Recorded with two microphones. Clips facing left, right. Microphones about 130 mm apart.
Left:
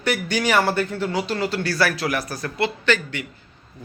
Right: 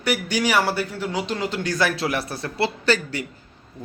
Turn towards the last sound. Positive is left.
turn(degrees=-35)  # may be behind; listen again after turning